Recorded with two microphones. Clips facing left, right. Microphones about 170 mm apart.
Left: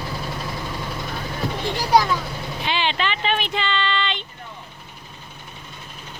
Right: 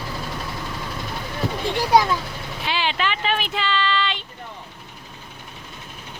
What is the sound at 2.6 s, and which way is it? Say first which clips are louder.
Speech: even; 5° right (ahead or behind).